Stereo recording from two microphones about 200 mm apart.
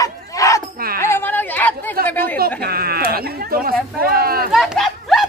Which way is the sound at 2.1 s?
10° left (ahead or behind).